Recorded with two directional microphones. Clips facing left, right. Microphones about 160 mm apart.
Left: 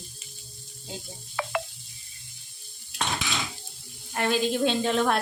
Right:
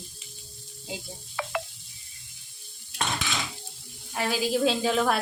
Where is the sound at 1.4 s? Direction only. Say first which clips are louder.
Left 2 dB; 60° left (ahead or behind).